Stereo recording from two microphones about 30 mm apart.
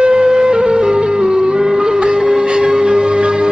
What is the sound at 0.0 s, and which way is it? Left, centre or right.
Music, right.